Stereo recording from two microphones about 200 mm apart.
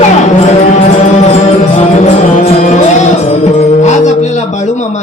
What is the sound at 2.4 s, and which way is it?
Music, 35° left (ahead or behind).